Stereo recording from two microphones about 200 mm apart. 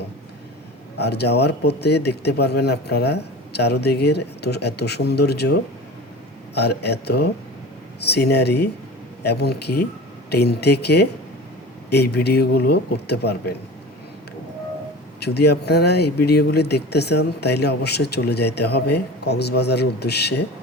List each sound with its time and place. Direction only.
0.9 s speech: 55° left (ahead or behind)
15.2 s speech: 55° left (ahead or behind)